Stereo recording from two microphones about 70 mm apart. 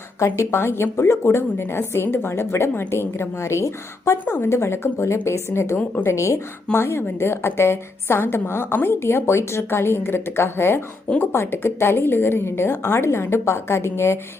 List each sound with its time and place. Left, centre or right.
0.3 s a woman's voice: left